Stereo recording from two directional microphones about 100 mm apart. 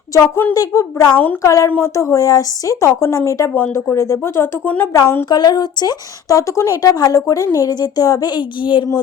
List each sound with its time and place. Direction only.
0.5 s speech: 35° left (ahead or behind)
1.1 s a woman's voice: 15° left (ahead or behind)
1.4 s speech: 30° left (ahead or behind)
3.5 s speech: 20° left (ahead or behind)
4.6 s a woman's voice: 15° left (ahead or behind)
4.9 s speech: 30° left (ahead or behind)
5.3 s speech: 45° left (ahead or behind)
8.4 s speech: 55° left (ahead or behind)